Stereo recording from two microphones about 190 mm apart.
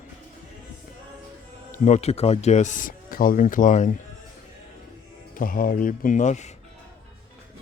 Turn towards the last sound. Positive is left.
turn(degrees=40)  # may be behind; listen again after turning